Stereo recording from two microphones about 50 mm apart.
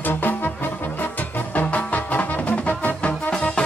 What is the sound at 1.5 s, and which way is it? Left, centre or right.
Music, left.